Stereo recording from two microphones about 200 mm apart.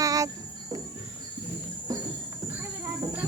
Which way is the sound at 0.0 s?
15° right (ahead or behind).